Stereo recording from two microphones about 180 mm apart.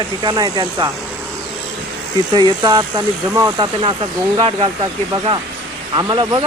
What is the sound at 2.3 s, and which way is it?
Speech, 25° right (ahead or behind).